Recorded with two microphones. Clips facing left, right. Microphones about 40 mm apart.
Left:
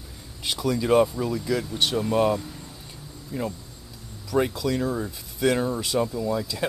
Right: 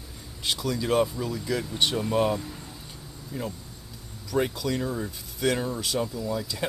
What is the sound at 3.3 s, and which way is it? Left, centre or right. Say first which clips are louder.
Speech: left 4 dB; centre.